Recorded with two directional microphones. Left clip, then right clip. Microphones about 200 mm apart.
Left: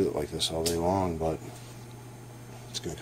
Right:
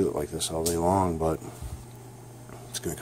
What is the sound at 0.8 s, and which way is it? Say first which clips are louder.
Speech: right 6 dB; 20° right (ahead or behind).